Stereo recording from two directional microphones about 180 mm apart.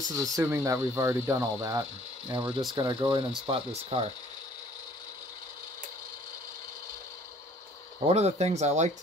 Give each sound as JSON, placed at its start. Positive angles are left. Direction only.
{"t": 0.1, "sound": "speech", "side_deg": -20}
{"t": 8.1, "sound": "speech", "side_deg": -35}